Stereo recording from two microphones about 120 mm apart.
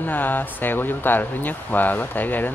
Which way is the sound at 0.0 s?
15° left (ahead or behind).